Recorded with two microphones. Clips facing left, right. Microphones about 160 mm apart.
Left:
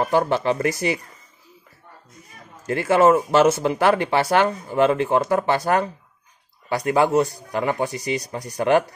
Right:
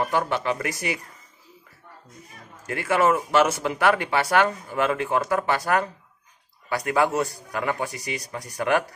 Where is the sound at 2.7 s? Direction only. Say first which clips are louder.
Left 5 dB; 30° left (ahead or behind).